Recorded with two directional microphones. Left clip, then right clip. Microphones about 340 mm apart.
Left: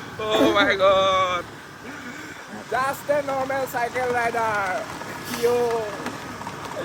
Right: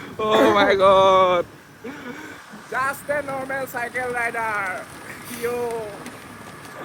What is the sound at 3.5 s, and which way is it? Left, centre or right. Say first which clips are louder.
Speech: left 2 dB; centre.